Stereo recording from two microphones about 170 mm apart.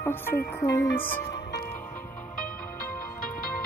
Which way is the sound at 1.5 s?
15° left (ahead or behind).